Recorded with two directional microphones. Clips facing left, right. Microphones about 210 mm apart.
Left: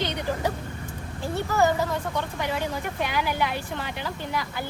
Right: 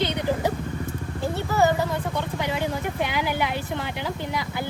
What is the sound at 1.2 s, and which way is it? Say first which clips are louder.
Speech: right 1 dB; 15° right (ahead or behind).